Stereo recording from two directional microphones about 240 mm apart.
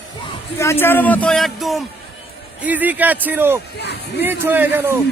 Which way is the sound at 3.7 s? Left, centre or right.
Left.